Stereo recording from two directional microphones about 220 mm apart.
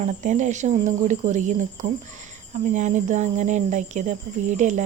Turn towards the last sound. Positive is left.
turn(degrees=-35)  # may be behind; listen again after turning